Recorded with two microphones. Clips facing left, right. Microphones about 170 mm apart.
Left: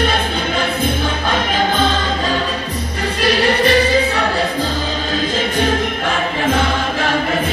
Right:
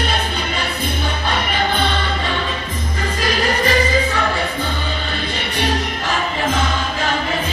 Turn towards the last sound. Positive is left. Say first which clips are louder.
# left 3 dB
turn(degrees=55)  # may be behind; listen again after turning